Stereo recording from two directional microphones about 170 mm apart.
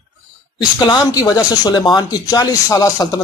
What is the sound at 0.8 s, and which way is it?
Speech, 25° left (ahead or behind).